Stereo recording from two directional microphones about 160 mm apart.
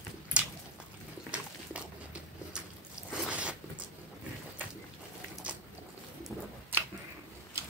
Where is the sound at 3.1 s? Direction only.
5° right (ahead or behind).